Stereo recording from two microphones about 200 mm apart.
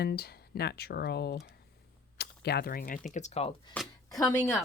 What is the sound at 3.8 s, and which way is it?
Speech, 5° left (ahead or behind).